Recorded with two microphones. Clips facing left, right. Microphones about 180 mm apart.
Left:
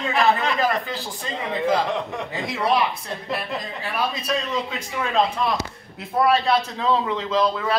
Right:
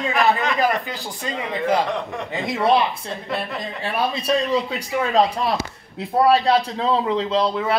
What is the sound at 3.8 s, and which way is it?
Speech, 30° right (ahead or behind).